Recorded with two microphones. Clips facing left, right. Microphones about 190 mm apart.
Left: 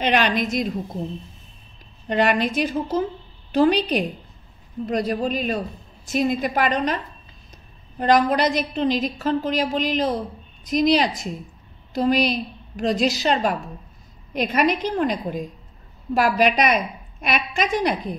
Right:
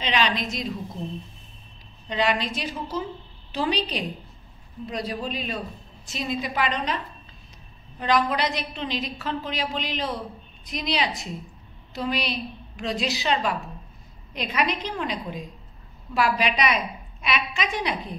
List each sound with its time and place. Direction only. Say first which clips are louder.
0.0 s a woman's voice: left 5 dB; 55° left (ahead or behind)
2.0 s a woman's voice: left 5 dB; 55° left (ahead or behind)
8.0 s a woman's voice: left 5 dB; 45° left (ahead or behind)